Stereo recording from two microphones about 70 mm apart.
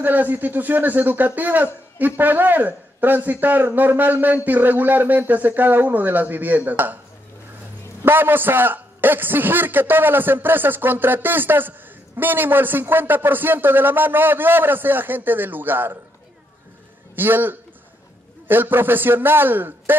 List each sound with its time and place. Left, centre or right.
0.0 s speech: right
8.0 s speech: right
17.1 s a man's voice: right